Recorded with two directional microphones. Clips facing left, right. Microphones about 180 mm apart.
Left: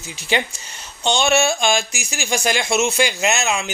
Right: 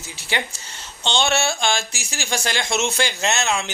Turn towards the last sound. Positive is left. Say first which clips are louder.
# left 2 dB
turn(degrees=10)  # may be behind; listen again after turning